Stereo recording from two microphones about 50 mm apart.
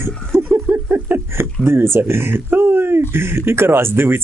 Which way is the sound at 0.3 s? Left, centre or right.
Right.